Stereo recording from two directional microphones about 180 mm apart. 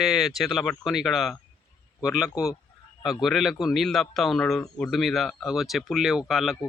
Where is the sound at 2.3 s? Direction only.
20° left (ahead or behind).